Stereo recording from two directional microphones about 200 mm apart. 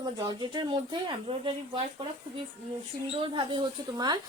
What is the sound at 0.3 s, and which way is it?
Speech, 20° right (ahead or behind).